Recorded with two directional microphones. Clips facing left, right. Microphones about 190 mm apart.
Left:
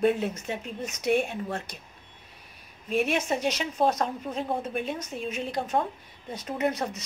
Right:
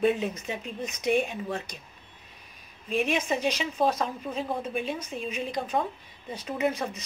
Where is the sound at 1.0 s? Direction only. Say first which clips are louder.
Left 1 dB; 10° left (ahead or behind).